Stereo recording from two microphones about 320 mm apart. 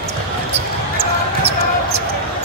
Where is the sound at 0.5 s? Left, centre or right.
Centre.